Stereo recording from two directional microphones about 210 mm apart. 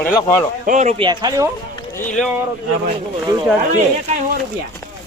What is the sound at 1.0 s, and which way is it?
Speech, 20° right (ahead or behind).